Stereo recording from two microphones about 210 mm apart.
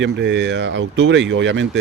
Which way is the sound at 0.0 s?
55° right (ahead or behind).